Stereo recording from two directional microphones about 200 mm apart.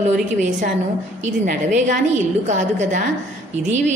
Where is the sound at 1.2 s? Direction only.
35° right (ahead or behind).